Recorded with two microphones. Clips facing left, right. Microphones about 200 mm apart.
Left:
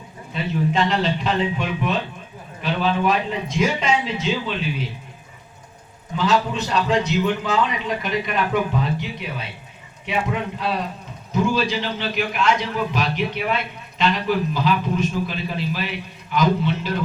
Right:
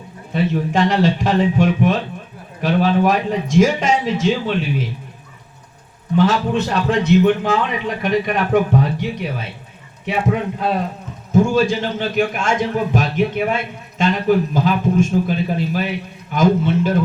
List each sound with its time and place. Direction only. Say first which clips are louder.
0.3 s a man's voice: right 4 dB; 50° right (ahead or behind)
6.1 s a man's voice: right 5 dB; 55° right (ahead or behind)
11.3 s a man's voice: right 6 dB; 45° right (ahead or behind)